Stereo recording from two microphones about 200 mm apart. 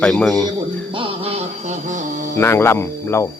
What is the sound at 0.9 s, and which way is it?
Music, 30° right (ahead or behind).